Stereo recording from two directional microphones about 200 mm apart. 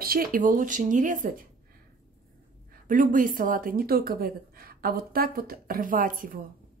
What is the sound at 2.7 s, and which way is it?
A woman's voice, 40° right (ahead or behind).